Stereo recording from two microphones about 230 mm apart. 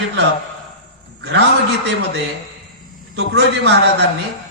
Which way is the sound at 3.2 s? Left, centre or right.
Right.